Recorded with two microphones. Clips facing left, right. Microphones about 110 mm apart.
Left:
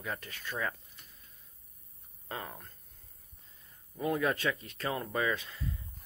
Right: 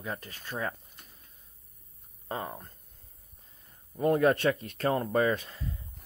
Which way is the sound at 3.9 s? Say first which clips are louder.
Right 7 dB; 45° right (ahead or behind).